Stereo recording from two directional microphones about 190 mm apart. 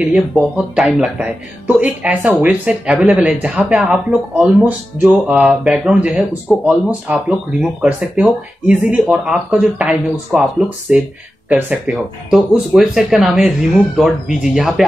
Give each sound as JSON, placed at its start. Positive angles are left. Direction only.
{"t": 0.0, "sound": "speech", "side_deg": -5}
{"t": 11.4, "sound": "speech", "side_deg": -5}